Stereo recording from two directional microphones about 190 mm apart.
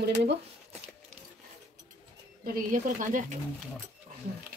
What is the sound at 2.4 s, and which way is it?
Speech, 45° right (ahead or behind).